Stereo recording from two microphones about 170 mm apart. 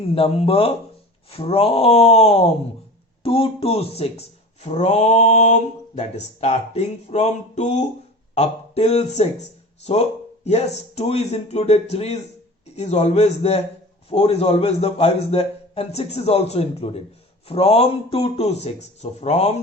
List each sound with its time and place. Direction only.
0.1 s speech: 35° left (ahead or behind)